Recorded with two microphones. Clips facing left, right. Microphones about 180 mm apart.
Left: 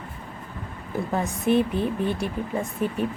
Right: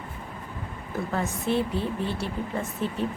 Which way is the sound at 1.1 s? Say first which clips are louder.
Left 5 dB; 15° left (ahead or behind).